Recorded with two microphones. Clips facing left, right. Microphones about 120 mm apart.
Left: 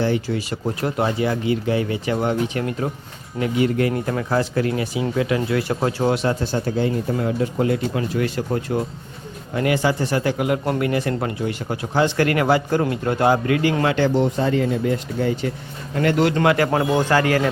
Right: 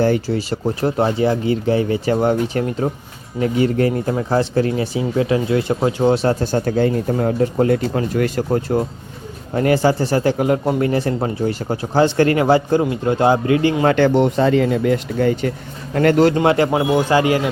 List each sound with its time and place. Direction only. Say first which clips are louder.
0.3 s speech: right 4 dB; 30° right (ahead or behind)
6.1 s speech: right 4 dB; 40° right (ahead or behind)
6.7 s speech: right 4 dB; 50° right (ahead or behind); by 13.7 s 25° right (ahead or behind)
13.9 s speech: right 4 dB; 65° right (ahead or behind)
16.0 s speech: right 5 dB; 45° right (ahead or behind)
16.3 s speech: right 3 dB; 25° right (ahead or behind)
16.7 s speech: right 3 dB; 10° right (ahead or behind)